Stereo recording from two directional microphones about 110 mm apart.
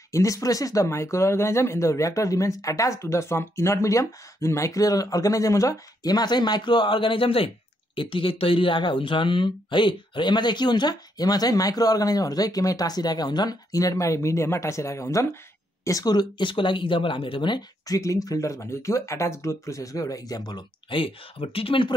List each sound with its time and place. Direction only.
0.1 s speech: 30° left (ahead or behind); by 21.9 s 55° left (ahead or behind)